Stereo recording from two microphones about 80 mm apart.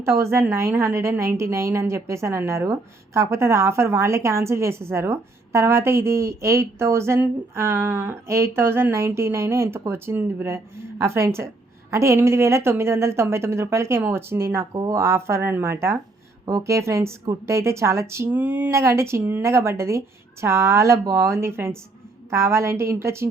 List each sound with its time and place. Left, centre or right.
0.0 s a woman's voice: right
14.7 s speech: right
14.9 s a woman's voice: right
18.3 s a sound: right
18.7 s a woman's voice: right